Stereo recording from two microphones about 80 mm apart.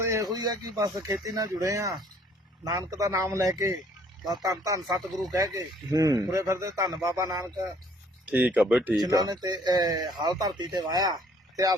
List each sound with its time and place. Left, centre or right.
0.0 s a sound: right
0.3 s a man's voice: right
8.3 s speech: centre
9.0 s a man's voice: right